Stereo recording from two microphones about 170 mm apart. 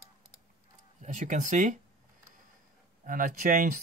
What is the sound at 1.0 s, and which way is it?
Speech, 50° right (ahead or behind).